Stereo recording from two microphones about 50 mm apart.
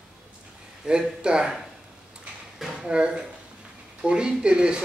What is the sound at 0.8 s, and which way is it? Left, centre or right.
Speech, centre.